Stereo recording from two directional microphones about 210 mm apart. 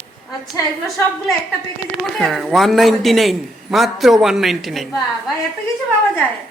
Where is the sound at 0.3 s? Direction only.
15° left (ahead or behind).